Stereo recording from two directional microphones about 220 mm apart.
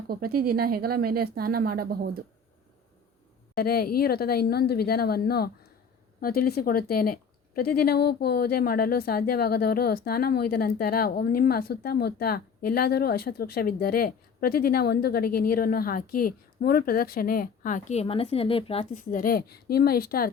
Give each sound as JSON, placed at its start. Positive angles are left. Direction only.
{"t": 0.1, "sound": "speech", "side_deg": -45}
{"t": 3.5, "sound": "a woman's voice", "side_deg": 45}
{"t": 19.1, "sound": "a woman's voice", "side_deg": 40}